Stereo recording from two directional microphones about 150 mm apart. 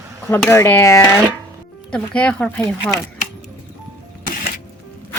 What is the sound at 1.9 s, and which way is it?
Speech, 5° left (ahead or behind).